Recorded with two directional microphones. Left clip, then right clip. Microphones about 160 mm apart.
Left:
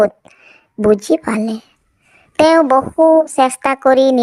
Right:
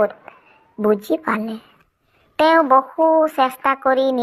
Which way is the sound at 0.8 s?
50° left (ahead or behind).